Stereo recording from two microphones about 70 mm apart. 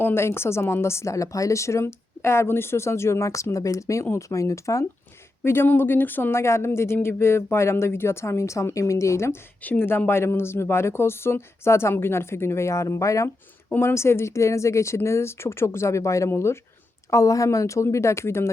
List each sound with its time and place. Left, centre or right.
0.0 s a woman's voice: left
5.5 s a woman's voice: left
13.7 s a woman's voice: left